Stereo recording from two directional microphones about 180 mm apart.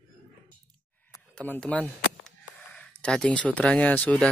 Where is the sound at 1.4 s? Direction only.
10° left (ahead or behind).